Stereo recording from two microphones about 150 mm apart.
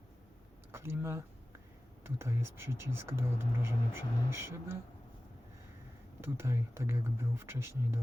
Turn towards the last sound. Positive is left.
turn(degrees=-15)  # may be behind; listen again after turning